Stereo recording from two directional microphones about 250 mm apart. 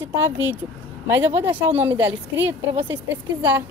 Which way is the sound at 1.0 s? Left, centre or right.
Centre.